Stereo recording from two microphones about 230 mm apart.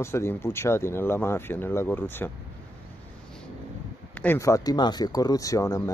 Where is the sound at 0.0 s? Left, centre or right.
Centre.